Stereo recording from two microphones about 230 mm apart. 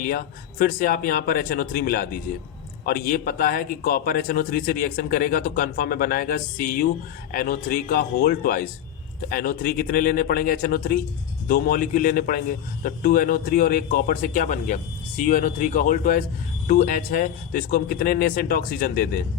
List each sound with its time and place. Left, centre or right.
0.0 s a man's voice: left